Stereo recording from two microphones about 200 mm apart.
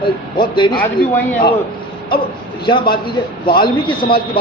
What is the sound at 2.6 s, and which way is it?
A man's voice, 25° left (ahead or behind).